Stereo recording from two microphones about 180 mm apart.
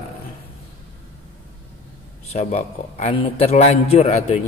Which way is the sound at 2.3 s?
35° left (ahead or behind).